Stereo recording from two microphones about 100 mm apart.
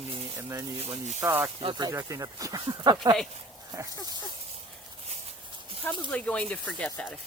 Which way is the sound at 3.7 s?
35° right (ahead or behind).